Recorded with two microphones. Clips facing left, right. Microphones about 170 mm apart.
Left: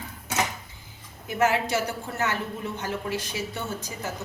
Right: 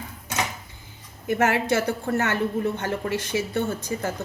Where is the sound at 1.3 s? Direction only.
60° right (ahead or behind).